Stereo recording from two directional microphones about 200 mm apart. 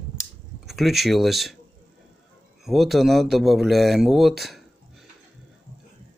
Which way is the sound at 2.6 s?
Centre (ahead or behind).